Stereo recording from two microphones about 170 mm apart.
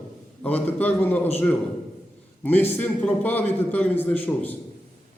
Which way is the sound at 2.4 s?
10° left (ahead or behind).